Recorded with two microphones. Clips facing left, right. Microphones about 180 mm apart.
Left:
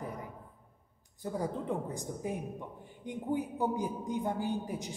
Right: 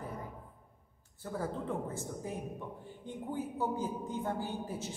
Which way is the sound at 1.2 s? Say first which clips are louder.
Left 2 dB; 15° left (ahead or behind).